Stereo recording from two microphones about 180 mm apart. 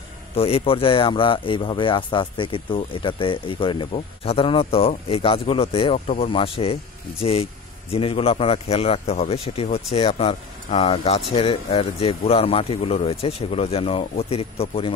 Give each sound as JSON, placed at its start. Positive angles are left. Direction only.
{"t": 0.4, "sound": "a man's voice", "side_deg": 30}